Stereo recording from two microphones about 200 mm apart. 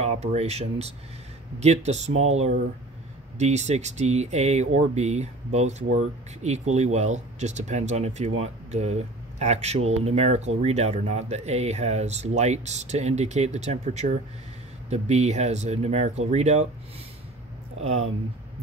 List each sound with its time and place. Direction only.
0.0 s speech: 35° right (ahead or behind)